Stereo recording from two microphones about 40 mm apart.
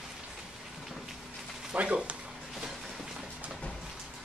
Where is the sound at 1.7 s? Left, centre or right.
Right.